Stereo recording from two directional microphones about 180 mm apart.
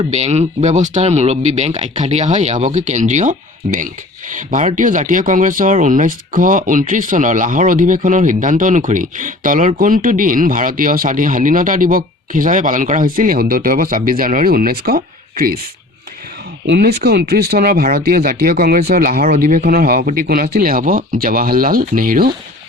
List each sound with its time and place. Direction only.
0.0 s speech: 40° right (ahead or behind); by 15.6 s 55° right (ahead or behind)
16.6 s speech: 65° right (ahead or behind)